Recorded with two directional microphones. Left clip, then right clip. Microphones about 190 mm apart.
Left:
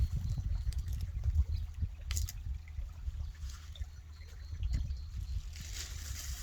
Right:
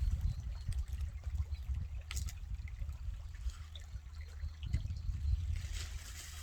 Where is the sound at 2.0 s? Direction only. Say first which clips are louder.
Left 4 dB; 15° left (ahead or behind).